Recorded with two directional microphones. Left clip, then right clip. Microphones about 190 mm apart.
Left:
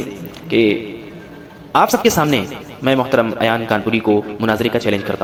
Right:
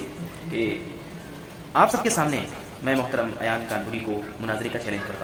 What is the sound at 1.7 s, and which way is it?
Speech, 40° left (ahead or behind).